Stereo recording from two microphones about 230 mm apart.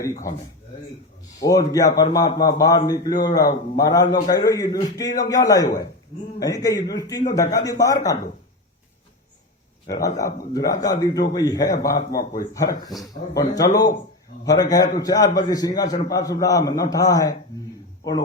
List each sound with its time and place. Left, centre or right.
1.4 s a man's voice: centre
10.0 s a man's voice: centre
12.1 s a man's voice: left
13.0 s a man's voice: centre